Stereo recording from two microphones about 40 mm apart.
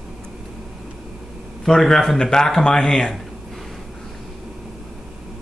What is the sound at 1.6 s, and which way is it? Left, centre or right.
A man's voice, centre.